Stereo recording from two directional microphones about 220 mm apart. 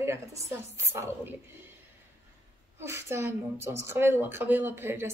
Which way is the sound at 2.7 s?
10° right (ahead or behind).